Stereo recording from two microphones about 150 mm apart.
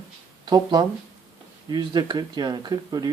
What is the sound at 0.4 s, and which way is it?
Speech, 30° right (ahead or behind).